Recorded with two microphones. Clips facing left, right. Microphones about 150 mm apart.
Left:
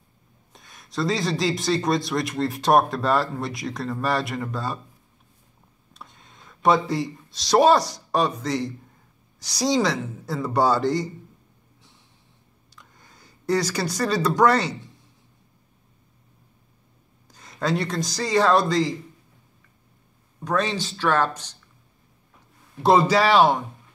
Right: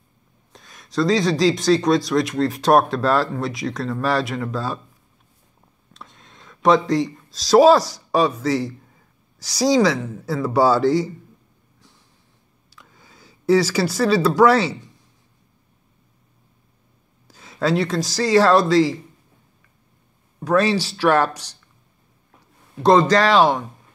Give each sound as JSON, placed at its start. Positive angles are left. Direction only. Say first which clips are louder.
{"t": 0.5, "sound": "speech", "louder": "right 3 dB", "side_deg": 0}
{"t": 5.9, "sound": "speech", "louder": "right 2 dB", "side_deg": 0}
{"t": 12.7, "sound": "speech", "louder": "right 3 dB", "side_deg": -5}
{"t": 17.3, "sound": "speech", "louder": "right 4 dB", "side_deg": -5}
{"t": 20.4, "sound": "speech", "louder": "right 6 dB", "side_deg": -5}
{"t": 21.3, "sound": "speech", "louder": "even", "side_deg": -75}
{"t": 22.8, "sound": "speech", "louder": "right 3 dB", "side_deg": 5}